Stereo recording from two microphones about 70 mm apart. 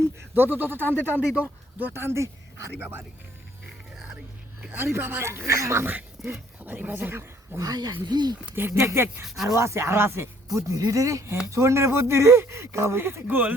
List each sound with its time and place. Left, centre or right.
0.3 s speech: right
4.8 s speech: right
5.8 s speech: right
7.6 s speech: right
8.0 s speech: right
8.5 s speech: right
9.2 s speech: centre
9.5 s speech: right
10.5 s speech: right
11.5 s speech: right
13.2 s speech: right